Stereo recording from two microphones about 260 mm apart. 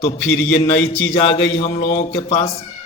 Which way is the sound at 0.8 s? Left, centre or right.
Left.